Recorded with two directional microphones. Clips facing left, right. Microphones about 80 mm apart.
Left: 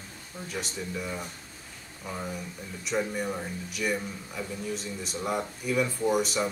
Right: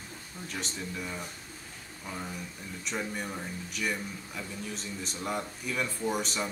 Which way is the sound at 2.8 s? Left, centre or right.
Centre.